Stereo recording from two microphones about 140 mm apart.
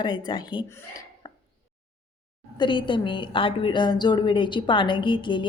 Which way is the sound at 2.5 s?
35° left (ahead or behind).